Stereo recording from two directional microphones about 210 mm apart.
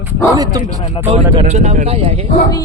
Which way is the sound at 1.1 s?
30° right (ahead or behind).